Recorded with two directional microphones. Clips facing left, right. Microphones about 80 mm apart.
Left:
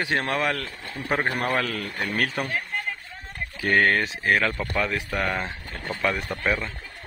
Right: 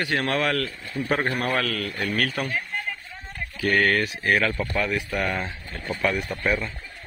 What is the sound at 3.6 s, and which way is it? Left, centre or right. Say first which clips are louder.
Speech: even; left.